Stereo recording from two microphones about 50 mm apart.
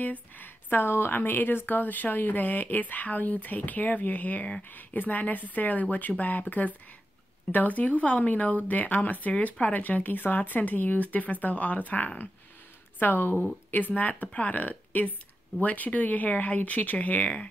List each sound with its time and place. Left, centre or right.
0.0 s a woman's voice: left